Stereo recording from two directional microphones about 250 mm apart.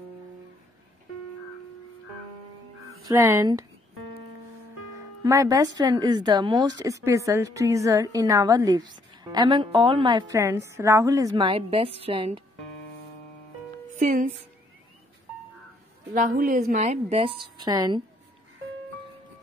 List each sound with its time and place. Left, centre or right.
3.1 s speech: centre
4.9 s speech: centre
13.9 s speech: right
16.1 s a woman's voice: right; by 18.0 s centre